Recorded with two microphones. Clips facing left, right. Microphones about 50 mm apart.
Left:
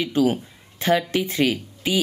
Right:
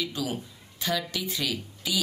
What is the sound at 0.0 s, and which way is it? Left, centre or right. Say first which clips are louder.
Speech: left 11 dB; left.